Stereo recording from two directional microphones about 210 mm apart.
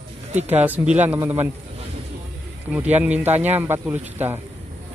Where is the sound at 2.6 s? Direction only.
5° right (ahead or behind).